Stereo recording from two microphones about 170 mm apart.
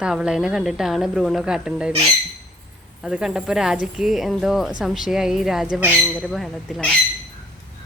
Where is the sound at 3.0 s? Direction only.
5° right (ahead or behind).